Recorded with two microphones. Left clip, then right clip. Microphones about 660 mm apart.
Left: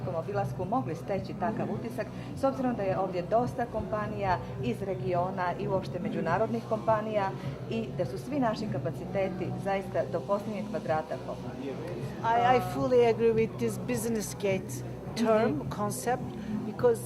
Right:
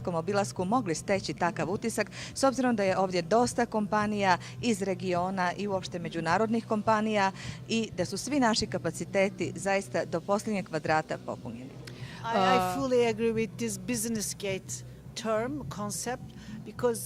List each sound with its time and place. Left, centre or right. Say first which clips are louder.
0.3 s a woman's voice: right 3 dB; right
12.2 s a woman's voice: left 3 dB; right
12.7 s speech: left 2 dB; right